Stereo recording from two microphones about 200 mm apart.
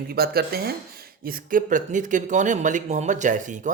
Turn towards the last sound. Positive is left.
turn(degrees=-40)  # may be behind; listen again after turning